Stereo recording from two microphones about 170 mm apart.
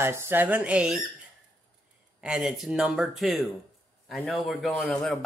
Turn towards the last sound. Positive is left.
turn(degrees=5)  # may be behind; listen again after turning